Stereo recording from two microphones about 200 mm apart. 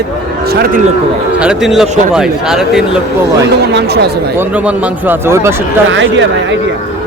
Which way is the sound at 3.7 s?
55° right (ahead or behind).